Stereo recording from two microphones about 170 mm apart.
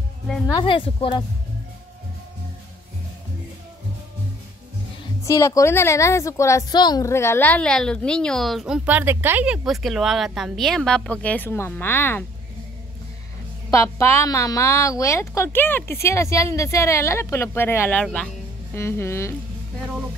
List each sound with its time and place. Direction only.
0.5 s speech: 30° left (ahead or behind)
5.2 s a woman's voice: 20° left (ahead or behind)
13.7 s a woman's voice: 20° left (ahead or behind)